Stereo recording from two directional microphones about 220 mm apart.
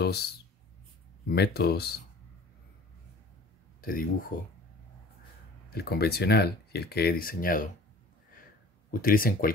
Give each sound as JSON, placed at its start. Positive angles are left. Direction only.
{"t": 0.0, "sound": "speech", "side_deg": 45}
{"t": 1.3, "sound": "speech", "side_deg": 45}
{"t": 3.8, "sound": "speech", "side_deg": 40}
{"t": 5.8, "sound": "speech", "side_deg": 45}
{"t": 8.9, "sound": "speech", "side_deg": 40}